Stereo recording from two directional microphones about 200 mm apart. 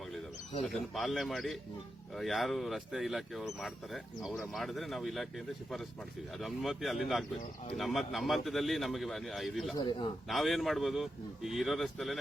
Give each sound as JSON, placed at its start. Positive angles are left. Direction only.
{"t": 0.7, "sound": "speech", "side_deg": 0}
{"t": 6.4, "sound": "speech", "side_deg": 0}
{"t": 9.7, "sound": "a man's voice", "side_deg": 20}
{"t": 10.2, "sound": "speech", "side_deg": 0}